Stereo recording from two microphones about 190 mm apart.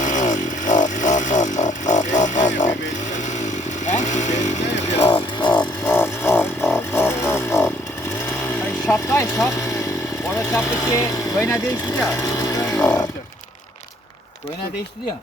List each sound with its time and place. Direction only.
0.0 s chainsaw: 40° left (ahead or behind)
2.2 s music: 40° left (ahead or behind)
3.8 s chainsaw: 40° left (ahead or behind)
5.1 s music: 25° left (ahead or behind)
5.5 s a sound: 15° left (ahead or behind)
8.9 s a sound: 15° left (ahead or behind)
10.3 s vehicle: 15° left (ahead or behind)